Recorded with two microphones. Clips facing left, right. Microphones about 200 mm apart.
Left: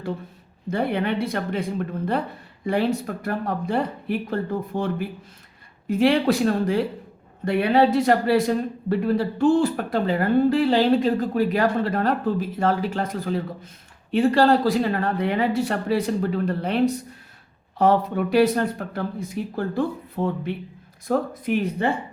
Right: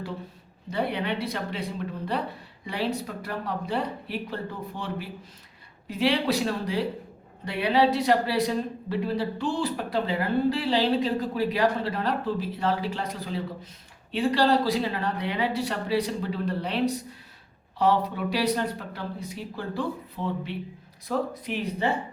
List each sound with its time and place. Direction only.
0.7 s a man's voice: 50° left (ahead or behind)